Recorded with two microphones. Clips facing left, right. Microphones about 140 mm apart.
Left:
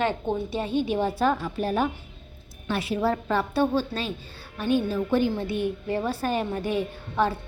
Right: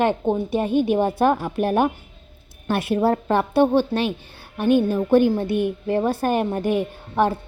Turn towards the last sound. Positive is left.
turn(degrees=-50)  # may be behind; listen again after turning